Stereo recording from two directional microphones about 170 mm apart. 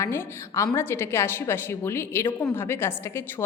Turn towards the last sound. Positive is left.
turn(degrees=15)  # may be behind; listen again after turning